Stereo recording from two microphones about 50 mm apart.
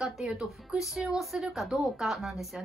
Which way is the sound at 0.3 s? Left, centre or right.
Centre.